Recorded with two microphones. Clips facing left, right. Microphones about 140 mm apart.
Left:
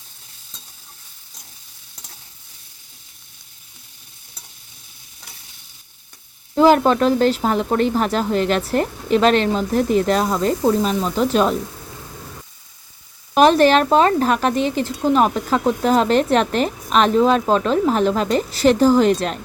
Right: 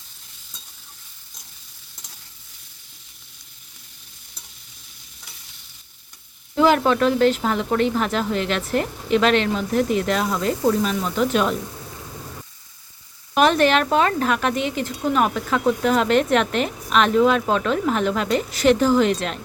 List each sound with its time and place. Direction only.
6.6 s speech: 40° left (ahead or behind)
13.3 s speech: 35° left (ahead or behind)